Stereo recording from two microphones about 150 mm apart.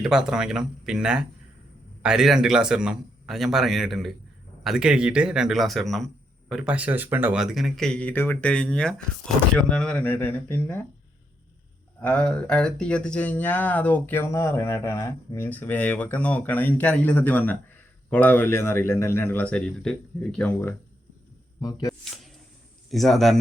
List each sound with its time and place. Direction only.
0.0 s a man's voice: 5° right (ahead or behind); by 10.8 s 10° left (ahead or behind)
11.9 s speech: 10° left (ahead or behind)
21.6 s speech: 25° left (ahead or behind)
22.9 s a man's voice: centre (ahead or behind)